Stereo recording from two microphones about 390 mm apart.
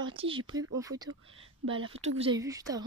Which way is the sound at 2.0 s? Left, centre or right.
Centre.